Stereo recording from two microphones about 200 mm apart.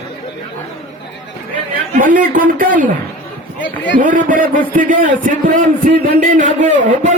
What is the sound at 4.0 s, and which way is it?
A man's voice, 40° right (ahead or behind).